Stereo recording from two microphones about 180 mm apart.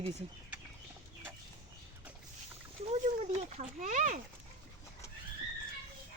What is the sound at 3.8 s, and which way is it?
Speech, 45° right (ahead or behind).